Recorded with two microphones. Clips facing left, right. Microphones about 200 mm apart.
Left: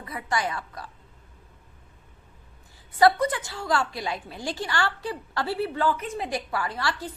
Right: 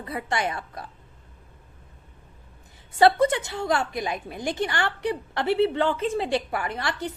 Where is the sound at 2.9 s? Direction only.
25° right (ahead or behind).